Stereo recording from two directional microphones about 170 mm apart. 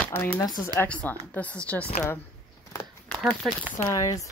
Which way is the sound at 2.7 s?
15° left (ahead or behind).